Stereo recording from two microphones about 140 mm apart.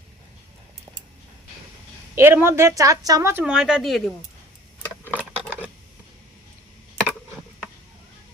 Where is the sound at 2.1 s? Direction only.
15° right (ahead or behind).